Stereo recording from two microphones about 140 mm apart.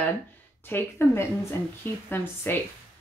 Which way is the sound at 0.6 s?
15° left (ahead or behind).